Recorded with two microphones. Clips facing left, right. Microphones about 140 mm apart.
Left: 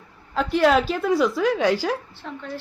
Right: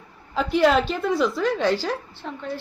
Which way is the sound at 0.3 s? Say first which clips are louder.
Even; centre (ahead or behind).